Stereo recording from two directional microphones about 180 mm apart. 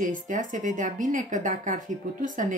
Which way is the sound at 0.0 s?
45° right (ahead or behind).